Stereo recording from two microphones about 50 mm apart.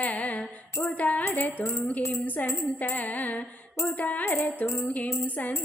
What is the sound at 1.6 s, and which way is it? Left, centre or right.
Speech, left.